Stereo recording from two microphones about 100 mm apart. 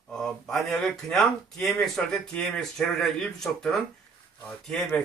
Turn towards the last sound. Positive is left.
turn(degrees=10)  # may be behind; listen again after turning